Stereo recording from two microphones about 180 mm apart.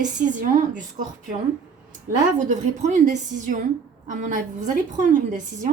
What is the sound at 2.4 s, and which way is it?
Speech, 45° right (ahead or behind).